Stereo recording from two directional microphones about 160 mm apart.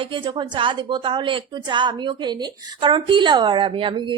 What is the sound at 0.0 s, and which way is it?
A woman's voice, 30° right (ahead or behind).